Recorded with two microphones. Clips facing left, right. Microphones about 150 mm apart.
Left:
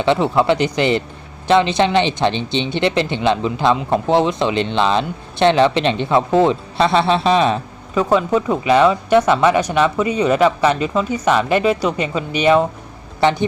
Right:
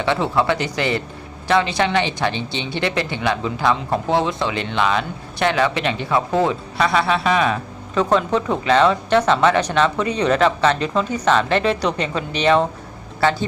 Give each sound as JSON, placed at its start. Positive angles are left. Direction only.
{"t": 0.0, "sound": "speech", "side_deg": 20}
{"t": 7.9, "sound": "speech", "side_deg": 10}